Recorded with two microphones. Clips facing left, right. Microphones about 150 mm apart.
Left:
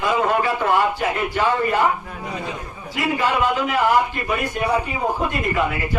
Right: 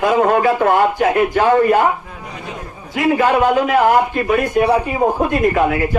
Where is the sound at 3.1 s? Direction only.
55° right (ahead or behind).